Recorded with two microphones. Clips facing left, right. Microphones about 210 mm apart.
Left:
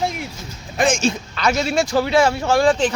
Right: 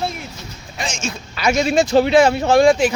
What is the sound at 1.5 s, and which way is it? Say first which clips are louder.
A man's voice: right 3 dB; 20° right (ahead or behind).